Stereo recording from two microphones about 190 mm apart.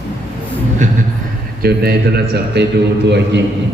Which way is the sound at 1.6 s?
55° right (ahead or behind).